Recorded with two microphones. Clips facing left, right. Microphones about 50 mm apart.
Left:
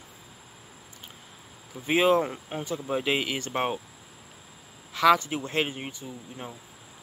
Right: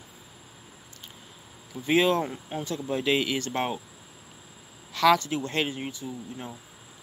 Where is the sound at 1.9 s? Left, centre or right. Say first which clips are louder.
Left 1 dB; left.